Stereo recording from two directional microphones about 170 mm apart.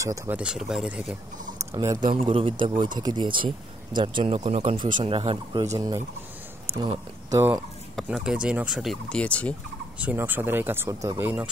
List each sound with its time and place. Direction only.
0.0 s speech: 20° right (ahead or behind)
0.4 s speech: 5° right (ahead or behind)
1.7 s speech: 20° right (ahead or behind)
2.0 s speech: 30° right (ahead or behind)
7.9 s speech: 5° right (ahead or behind)
9.9 s speech: 10° right (ahead or behind)